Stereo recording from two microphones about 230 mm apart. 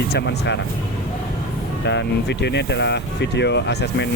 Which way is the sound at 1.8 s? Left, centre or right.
Left.